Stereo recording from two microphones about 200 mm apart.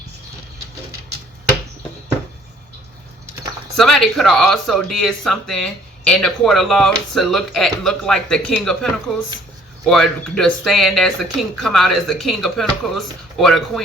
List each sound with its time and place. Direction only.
3.8 s speech: centre (ahead or behind)